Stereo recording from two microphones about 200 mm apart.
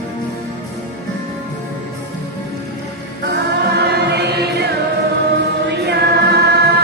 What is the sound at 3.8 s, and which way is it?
Choir, 55° right (ahead or behind).